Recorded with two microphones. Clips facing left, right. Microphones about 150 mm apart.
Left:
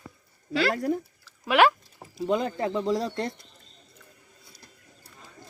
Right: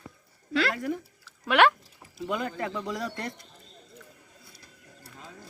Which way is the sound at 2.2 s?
30° left (ahead or behind).